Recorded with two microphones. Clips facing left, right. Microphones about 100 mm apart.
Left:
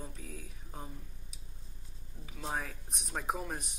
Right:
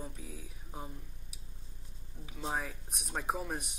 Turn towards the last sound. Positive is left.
turn(degrees=-5)  # may be behind; listen again after turning